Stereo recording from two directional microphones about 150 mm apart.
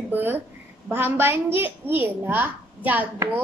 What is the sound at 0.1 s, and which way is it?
A woman's voice, 15° right (ahead or behind).